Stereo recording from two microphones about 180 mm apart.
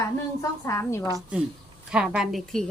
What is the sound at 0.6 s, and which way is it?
Speech, 15° left (ahead or behind).